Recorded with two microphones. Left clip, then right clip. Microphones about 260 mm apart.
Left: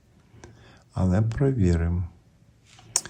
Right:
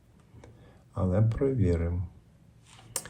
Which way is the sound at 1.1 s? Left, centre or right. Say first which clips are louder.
Left 2 dB; left.